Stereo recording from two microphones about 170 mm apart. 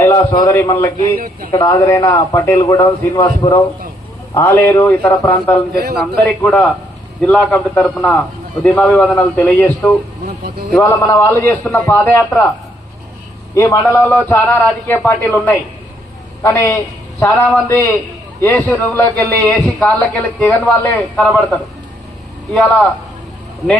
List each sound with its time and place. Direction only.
0.0 s a man's voice: 15° left (ahead or behind)
0.9 s speech: 55° right (ahead or behind)
1.5 s a man's voice: 25° left (ahead or behind); by 5.5 s 10° left (ahead or behind)
5.7 s a man's voice: 65° right (ahead or behind)
6.0 s a man's voice: 10° left (ahead or behind)
13.5 s a man's voice: 20° left (ahead or behind)